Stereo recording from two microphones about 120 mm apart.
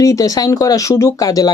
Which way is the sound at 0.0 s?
30° left (ahead or behind).